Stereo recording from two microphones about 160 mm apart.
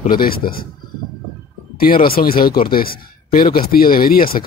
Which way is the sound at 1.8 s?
65° left (ahead or behind).